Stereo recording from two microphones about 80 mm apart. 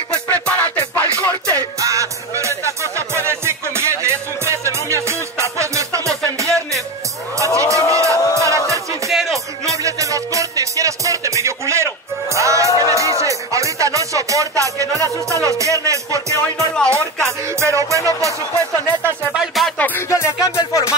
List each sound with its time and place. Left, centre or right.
0.1 s music: centre
1.5 s music: right
7.3 s a sound: right
8.4 s music: right
9.1 s music: centre
9.7 s music: right
19.3 s music: centre
19.8 s music: left
20.1 s music: left